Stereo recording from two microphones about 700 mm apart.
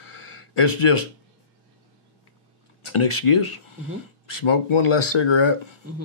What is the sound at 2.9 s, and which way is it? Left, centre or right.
Speech, left.